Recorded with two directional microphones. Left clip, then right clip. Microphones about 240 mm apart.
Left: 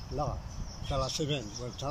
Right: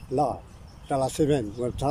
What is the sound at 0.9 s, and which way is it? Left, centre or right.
Speech, right.